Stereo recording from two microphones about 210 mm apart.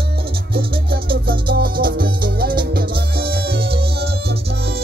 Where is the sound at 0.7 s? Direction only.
45° right (ahead or behind).